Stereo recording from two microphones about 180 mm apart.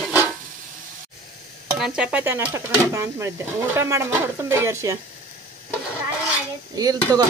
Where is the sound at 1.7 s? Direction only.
5° right (ahead or behind).